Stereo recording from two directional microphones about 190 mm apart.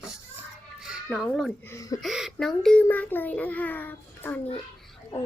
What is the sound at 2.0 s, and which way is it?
A child's voice, centre (ahead or behind).